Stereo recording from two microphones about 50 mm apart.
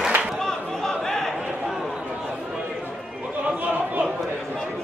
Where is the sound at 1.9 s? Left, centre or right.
Centre.